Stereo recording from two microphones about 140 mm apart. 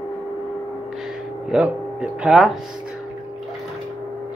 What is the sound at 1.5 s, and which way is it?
Speech, 5° right (ahead or behind).